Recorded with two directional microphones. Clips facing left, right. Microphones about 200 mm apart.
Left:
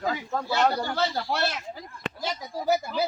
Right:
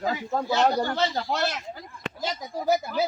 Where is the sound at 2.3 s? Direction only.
20° right (ahead or behind).